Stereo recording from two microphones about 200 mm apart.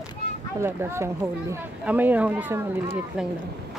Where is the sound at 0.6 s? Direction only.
10° right (ahead or behind).